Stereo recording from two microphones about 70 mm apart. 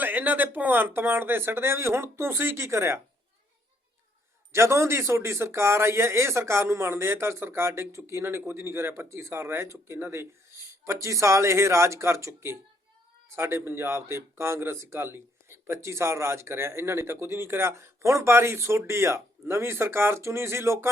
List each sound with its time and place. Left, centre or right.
0.0 s speech: right
4.5 s speech: right